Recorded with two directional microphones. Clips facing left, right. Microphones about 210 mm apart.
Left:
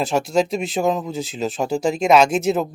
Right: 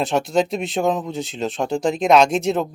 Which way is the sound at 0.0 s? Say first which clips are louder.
Even; centre (ahead or behind).